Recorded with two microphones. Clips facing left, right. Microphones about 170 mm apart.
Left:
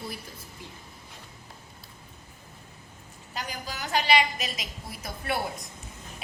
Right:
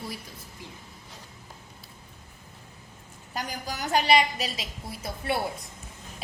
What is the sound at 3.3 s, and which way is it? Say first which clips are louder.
A woman's voice: right 2 dB; 45° right (ahead or behind).